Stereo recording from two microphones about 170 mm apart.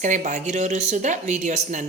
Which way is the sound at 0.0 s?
45° right (ahead or behind).